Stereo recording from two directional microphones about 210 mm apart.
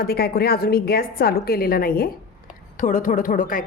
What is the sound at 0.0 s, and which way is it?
A woman's voice, 50° left (ahead or behind).